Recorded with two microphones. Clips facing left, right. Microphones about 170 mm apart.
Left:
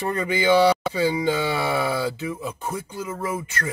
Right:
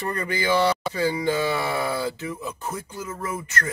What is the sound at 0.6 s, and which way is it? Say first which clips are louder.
Speech: left 3 dB; 15° left (ahead or behind).